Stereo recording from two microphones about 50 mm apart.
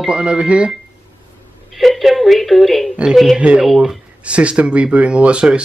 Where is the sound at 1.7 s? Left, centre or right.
Centre.